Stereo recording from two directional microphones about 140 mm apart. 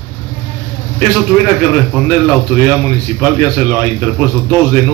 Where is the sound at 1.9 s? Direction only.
10° left (ahead or behind).